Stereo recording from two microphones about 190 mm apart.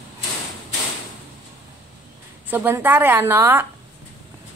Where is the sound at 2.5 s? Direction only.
10° right (ahead or behind).